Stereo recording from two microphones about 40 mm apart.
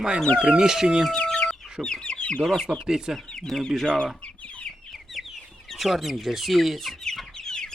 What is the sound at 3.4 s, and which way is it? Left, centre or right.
Speech, centre.